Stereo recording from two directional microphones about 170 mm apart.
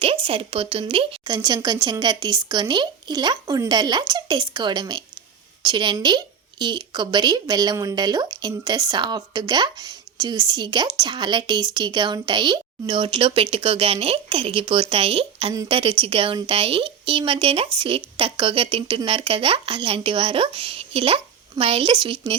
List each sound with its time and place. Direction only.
0.0 s a woman's voice: 35° right (ahead or behind)